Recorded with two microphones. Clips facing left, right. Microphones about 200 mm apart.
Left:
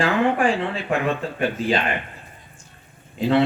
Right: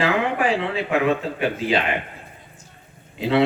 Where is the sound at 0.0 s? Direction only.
45° left (ahead or behind).